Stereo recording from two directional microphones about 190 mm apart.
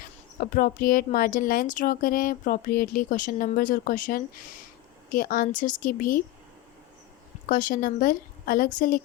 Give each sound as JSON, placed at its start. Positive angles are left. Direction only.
{"t": 0.3, "sound": "a woman's voice", "side_deg": 50}
{"t": 7.4, "sound": "a woman's voice", "side_deg": 45}